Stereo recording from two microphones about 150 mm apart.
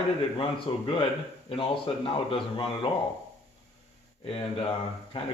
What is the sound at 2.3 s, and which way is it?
Speech, 35° left (ahead or behind).